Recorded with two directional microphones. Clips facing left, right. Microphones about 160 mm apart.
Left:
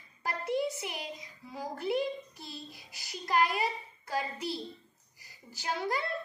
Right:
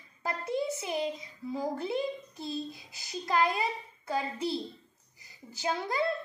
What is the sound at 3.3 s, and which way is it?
A woman's voice, 25° right (ahead or behind).